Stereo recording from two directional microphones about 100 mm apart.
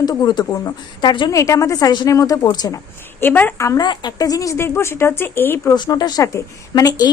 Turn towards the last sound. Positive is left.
turn(degrees=35)  # may be behind; listen again after turning